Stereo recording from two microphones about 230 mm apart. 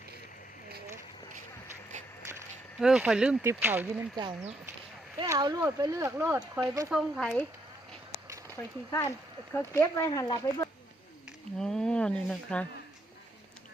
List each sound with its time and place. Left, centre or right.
2.7 s speech: centre
4.2 s speech: right
6.9 s speech: centre
8.4 s speech: centre
11.5 s speech: centre